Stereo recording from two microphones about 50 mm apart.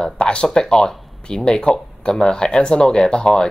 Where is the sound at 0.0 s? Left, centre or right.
Centre.